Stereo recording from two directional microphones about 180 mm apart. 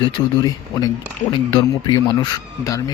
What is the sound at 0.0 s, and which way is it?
Speech, 20° left (ahead or behind).